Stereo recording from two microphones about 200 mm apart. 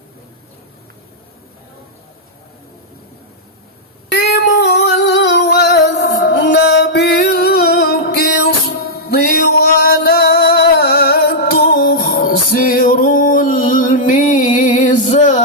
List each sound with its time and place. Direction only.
4.1 s female singing: 55° left (ahead or behind)
8.9 s music: 50° left (ahead or behind)